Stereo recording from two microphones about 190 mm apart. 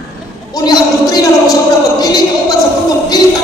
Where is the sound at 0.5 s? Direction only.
20° left (ahead or behind).